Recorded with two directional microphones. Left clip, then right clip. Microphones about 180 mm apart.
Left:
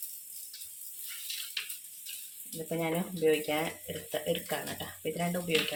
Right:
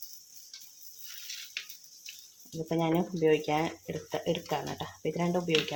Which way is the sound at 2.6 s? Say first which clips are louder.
Right 4 dB; 55° right (ahead or behind).